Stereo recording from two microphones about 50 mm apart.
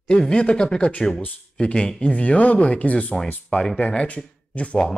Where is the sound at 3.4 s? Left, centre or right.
Centre.